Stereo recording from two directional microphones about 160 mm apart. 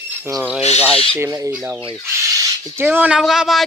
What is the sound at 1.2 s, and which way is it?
Fowl, 20° right (ahead or behind).